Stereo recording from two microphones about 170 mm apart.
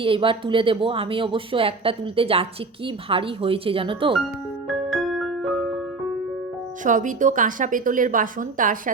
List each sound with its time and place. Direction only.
0.0 s speech: 30° right (ahead or behind)
4.7 s music: centre (ahead or behind)
6.8 s a woman's voice: 50° right (ahead or behind)